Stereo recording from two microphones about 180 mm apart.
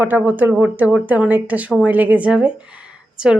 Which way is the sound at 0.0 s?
10° right (ahead or behind).